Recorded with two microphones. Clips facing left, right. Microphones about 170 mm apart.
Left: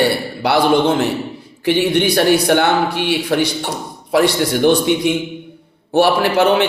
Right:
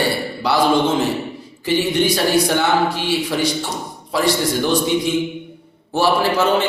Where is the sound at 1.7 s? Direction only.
65° left (ahead or behind).